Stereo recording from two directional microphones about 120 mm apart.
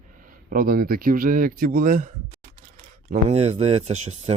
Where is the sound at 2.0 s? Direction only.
90° right.